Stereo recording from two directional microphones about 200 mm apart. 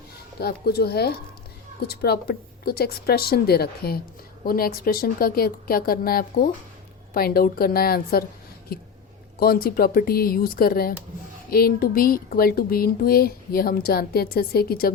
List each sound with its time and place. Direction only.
0.3 s speech: 50° left (ahead or behind)
9.4 s speech: 50° left (ahead or behind)